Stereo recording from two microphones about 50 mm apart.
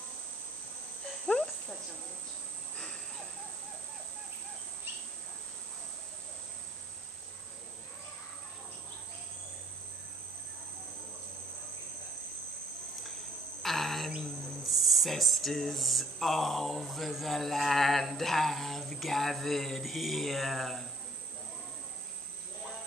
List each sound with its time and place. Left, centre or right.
1.2 s cricket: centre
13.6 s cricket: centre
14.6 s speech: centre